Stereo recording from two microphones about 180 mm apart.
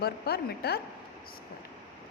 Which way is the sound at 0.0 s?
60° left (ahead or behind).